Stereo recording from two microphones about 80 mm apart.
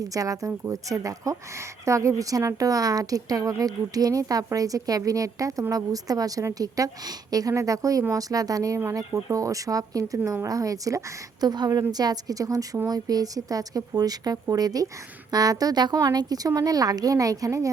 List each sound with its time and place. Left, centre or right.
0.0 s a woman's voice: right